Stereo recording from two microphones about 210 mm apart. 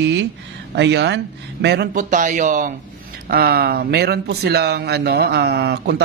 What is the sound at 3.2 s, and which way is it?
Speech, 45° right (ahead or behind).